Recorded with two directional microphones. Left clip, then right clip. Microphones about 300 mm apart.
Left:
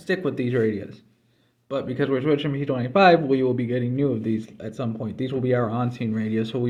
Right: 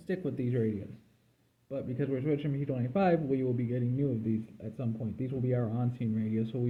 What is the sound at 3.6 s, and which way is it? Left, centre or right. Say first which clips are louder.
Speech: left 10 dB; left.